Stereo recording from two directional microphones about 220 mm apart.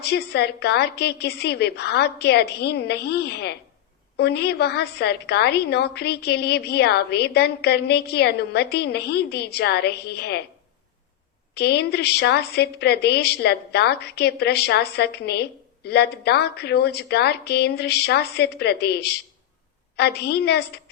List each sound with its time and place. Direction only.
0.0 s a woman's voice: 45° left (ahead or behind)
11.5 s a woman's voice: 50° left (ahead or behind)